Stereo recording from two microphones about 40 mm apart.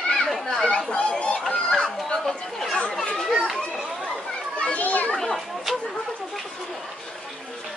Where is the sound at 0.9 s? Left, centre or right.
Left.